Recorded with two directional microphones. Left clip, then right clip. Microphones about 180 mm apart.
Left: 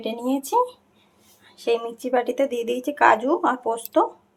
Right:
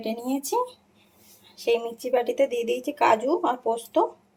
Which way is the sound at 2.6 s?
10° left (ahead or behind).